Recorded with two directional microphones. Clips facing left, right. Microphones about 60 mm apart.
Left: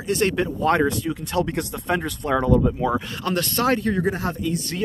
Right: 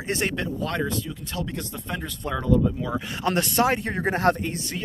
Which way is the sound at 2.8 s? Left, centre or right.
Left.